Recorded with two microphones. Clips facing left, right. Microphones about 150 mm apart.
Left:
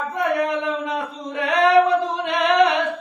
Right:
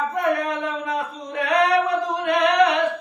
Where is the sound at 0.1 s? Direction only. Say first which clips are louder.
Left 1 dB; 25° left (ahead or behind).